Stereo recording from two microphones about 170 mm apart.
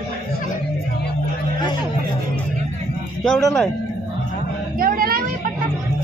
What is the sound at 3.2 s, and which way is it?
Speech, 5° left (ahead or behind).